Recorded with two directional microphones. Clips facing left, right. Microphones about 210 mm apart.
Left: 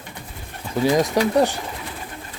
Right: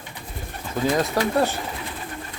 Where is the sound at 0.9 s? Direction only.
15° left (ahead or behind).